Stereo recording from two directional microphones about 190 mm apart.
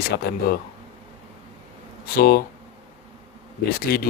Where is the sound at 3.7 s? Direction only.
50° left (ahead or behind).